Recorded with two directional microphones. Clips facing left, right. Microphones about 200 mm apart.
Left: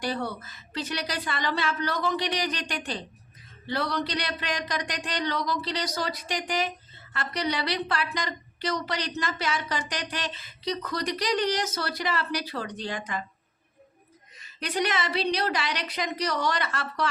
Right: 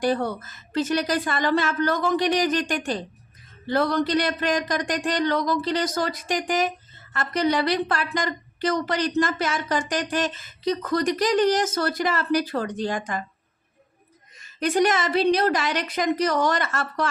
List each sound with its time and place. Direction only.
0.0 s a woman's voice: 50° right (ahead or behind)
14.3 s a woman's voice: 45° right (ahead or behind)